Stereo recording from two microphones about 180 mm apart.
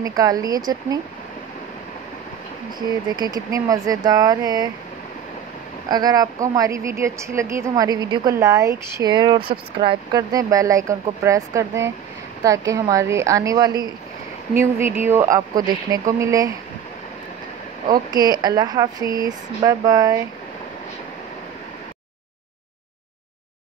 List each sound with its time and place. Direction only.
0.0 s speech: 20° right (ahead or behind)
3.2 s speech: 20° right (ahead or behind)
5.9 s speech: 20° right (ahead or behind)
17.9 s speech: 20° right (ahead or behind)